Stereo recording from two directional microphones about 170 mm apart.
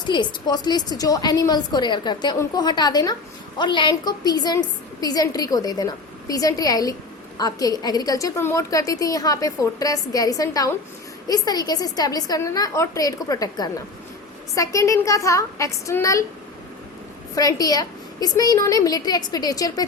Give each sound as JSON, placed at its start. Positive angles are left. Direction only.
{"t": 0.1, "sound": "a woman's voice", "side_deg": 25}
{"t": 17.3, "sound": "a woman's voice", "side_deg": 20}